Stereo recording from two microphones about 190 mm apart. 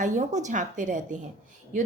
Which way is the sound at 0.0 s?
40° right (ahead or behind).